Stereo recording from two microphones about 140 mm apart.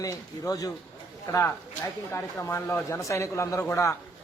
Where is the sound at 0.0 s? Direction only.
25° left (ahead or behind).